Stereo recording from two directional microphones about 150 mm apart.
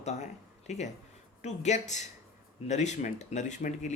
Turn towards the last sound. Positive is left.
turn(degrees=55)  # may be behind; listen again after turning